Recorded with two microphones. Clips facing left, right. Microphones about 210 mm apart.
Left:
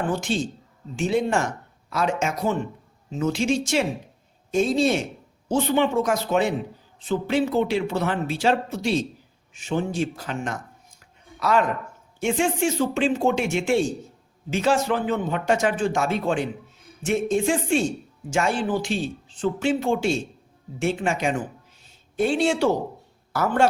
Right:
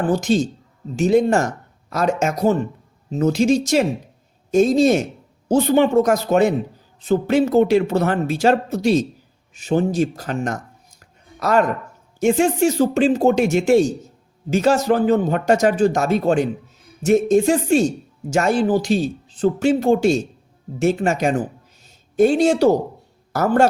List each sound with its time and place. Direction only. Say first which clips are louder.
0.1 s speech: right 7 dB; 40° right (ahead or behind)
11.0 s a sound: right 3 dB; 45° right (ahead or behind)
12.2 s speech: right 6 dB; 40° right (ahead or behind)